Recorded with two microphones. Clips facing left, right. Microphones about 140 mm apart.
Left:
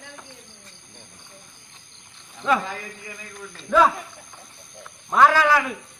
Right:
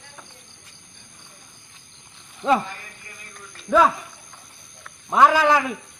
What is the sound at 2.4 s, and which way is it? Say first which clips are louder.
Speech: right 2 dB; 40° right (ahead or behind).